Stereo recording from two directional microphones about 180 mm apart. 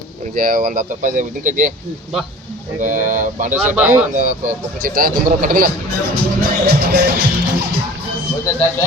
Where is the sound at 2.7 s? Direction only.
45° right (ahead or behind).